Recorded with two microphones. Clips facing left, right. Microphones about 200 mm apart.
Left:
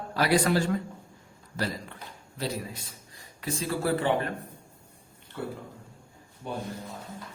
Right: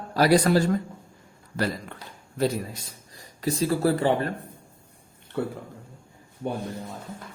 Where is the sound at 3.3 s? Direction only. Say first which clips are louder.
Right 6 dB; 40° right (ahead or behind).